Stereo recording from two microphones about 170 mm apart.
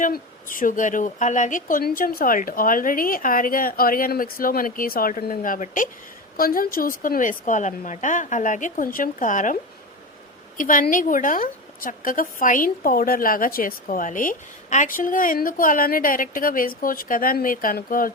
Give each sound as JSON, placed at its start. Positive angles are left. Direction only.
{"t": 0.0, "sound": "a woman's voice", "side_deg": 50}
{"t": 10.6, "sound": "a woman's voice", "side_deg": 50}